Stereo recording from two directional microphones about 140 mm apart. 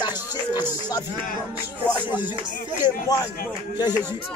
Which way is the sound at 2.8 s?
25° left (ahead or behind).